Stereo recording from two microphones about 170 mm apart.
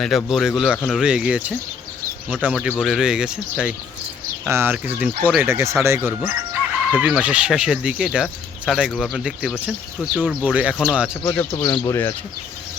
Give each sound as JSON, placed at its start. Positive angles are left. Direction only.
{"t": 0.0, "sound": "speech", "side_deg": 0}
{"t": 11.2, "sound": "speech", "side_deg": 10}
{"t": 11.5, "sound": "speech", "side_deg": 25}